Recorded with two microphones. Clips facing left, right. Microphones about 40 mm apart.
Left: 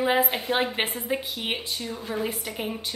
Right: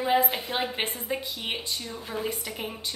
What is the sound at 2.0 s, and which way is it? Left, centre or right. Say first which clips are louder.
Speech: left 2 dB; centre.